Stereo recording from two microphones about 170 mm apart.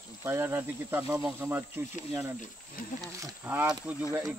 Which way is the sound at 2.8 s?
55° left (ahead or behind).